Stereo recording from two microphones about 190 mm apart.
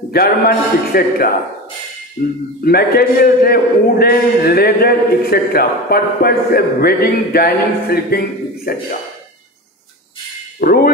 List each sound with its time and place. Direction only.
0.1 s a man's voice: 55° left (ahead or behind)
2.6 s a man's voice: 55° left (ahead or behind)
10.6 s music: 55° left (ahead or behind)